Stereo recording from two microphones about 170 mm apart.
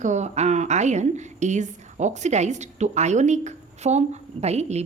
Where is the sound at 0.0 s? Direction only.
45° right (ahead or behind).